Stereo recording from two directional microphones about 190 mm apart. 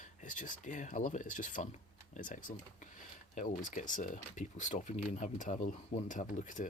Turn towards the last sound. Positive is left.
turn(degrees=40)  # may be behind; listen again after turning